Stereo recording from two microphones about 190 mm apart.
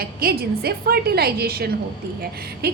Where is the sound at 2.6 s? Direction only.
55° right (ahead or behind).